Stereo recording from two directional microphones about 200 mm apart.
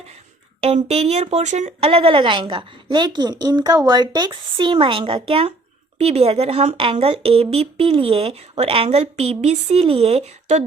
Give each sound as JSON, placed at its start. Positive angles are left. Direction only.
{"t": 0.6, "sound": "speech", "side_deg": -30}